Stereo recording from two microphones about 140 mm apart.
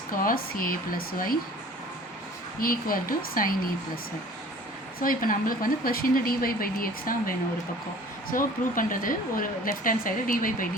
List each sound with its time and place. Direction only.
0.1 s speech: 90° left
2.6 s speech: 90° left
4.9 s speech: 90° left
8.3 s speech: 75° left (ahead or behind)